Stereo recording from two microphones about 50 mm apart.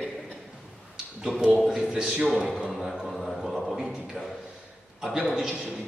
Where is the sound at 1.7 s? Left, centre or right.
Centre.